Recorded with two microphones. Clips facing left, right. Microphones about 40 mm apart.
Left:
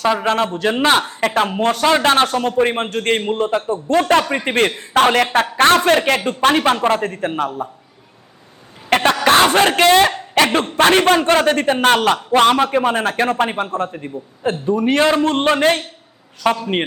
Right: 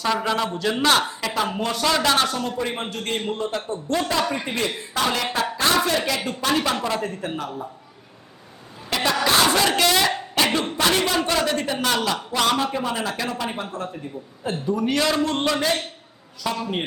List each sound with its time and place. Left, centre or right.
0.5 s a man's voice: left
4.4 s a man's voice: left
8.9 s a man's voice: left